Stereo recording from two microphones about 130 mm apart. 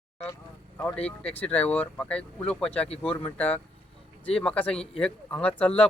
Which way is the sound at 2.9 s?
50° left (ahead or behind).